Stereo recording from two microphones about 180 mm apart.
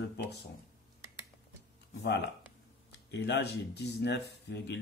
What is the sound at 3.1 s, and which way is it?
Speech, 70° left (ahead or behind).